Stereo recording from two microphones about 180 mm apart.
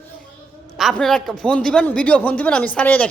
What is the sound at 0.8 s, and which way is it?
A woman's voice, centre (ahead or behind).